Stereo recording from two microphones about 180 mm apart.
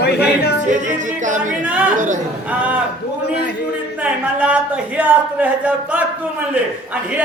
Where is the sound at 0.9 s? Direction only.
45° right (ahead or behind).